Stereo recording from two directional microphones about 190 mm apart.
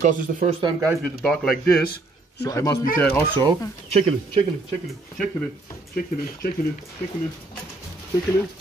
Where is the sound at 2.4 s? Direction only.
15° left (ahead or behind).